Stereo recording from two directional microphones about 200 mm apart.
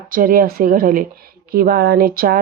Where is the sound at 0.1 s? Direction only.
45° right (ahead or behind).